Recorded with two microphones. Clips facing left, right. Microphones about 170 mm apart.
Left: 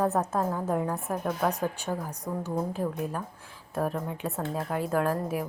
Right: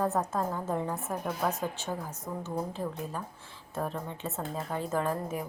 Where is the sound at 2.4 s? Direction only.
10° left (ahead or behind).